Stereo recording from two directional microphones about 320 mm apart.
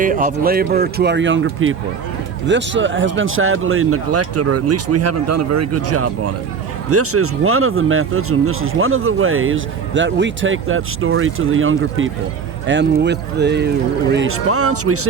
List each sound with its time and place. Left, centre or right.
0.0 s speech: right